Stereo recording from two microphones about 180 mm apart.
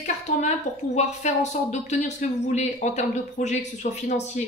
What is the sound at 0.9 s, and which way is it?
Speech, 40° left (ahead or behind).